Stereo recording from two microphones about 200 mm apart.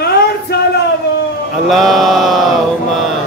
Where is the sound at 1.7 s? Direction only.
Centre (ahead or behind).